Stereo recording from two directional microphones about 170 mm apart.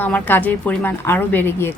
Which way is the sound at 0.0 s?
10° left (ahead or behind).